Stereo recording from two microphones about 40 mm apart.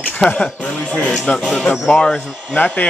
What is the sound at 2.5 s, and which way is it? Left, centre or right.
Music, left.